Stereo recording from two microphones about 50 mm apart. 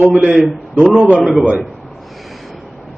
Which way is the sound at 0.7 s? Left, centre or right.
Right.